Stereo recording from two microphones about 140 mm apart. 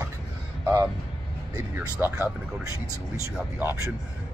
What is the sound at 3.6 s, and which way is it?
Speech, 15° right (ahead or behind).